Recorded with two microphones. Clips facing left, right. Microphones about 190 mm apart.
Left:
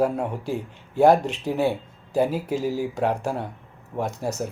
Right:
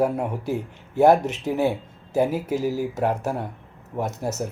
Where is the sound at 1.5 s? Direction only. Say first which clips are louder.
Right 1 dB; 10° left (ahead or behind).